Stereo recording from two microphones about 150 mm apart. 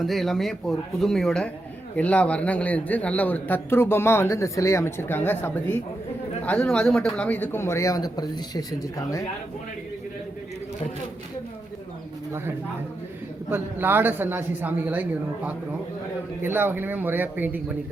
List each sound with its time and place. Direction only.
0.0 s a man's voice: centre (ahead or behind); by 9.2 s 25° left (ahead or behind)
13.5 s speech: 15° right (ahead or behind)
16.4 s speech: 15° right (ahead or behind)